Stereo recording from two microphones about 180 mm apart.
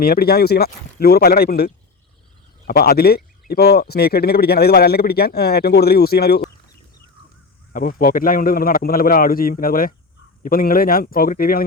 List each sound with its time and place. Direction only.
0.0 s speech: 60° left (ahead or behind)
7.7 s a man's voice: 50° left (ahead or behind)